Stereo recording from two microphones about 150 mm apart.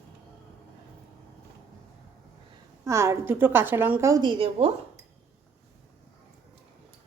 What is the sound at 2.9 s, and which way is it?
A woman's voice, 20° right (ahead or behind).